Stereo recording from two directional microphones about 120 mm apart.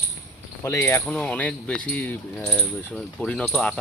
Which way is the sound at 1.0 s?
5° left (ahead or behind).